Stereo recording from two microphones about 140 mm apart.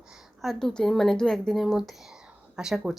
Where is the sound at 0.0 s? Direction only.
5° right (ahead or behind).